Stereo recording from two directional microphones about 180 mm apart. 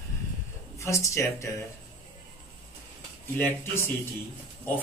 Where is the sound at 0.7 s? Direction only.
15° left (ahead or behind).